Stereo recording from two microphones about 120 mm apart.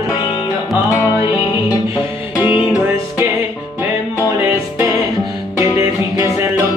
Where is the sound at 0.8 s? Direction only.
25° left (ahead or behind).